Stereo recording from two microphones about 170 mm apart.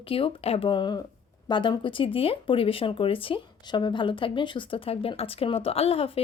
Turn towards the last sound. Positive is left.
turn(degrees=35)  # may be behind; listen again after turning